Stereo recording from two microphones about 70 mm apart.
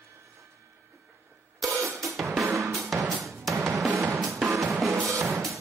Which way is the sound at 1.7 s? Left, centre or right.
Right.